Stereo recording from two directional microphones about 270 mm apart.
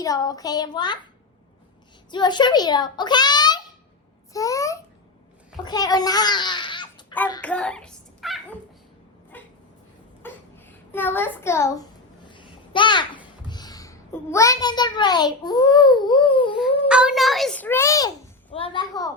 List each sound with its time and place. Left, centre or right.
0.0 s a child's voice: centre
2.0 s a child's voice: centre
7.1 s hands: centre
9.3 s dog: centre
10.2 s a sound: centre
12.2 s babbling: centre
13.5 s a child's voice: centre
16.9 s a child's voice: centre